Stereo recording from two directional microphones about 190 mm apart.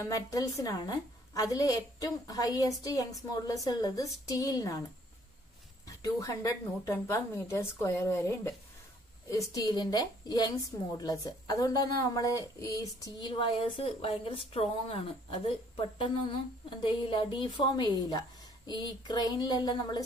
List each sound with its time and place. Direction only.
0.1 s a woman's voice: 20° left (ahead or behind)
5.9 s a woman's voice: 20° left (ahead or behind)